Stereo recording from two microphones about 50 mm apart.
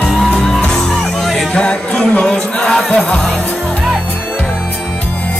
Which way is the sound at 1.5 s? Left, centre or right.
Centre.